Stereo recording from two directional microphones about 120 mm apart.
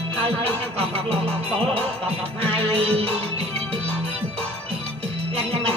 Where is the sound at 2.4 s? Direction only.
55° right (ahead or behind).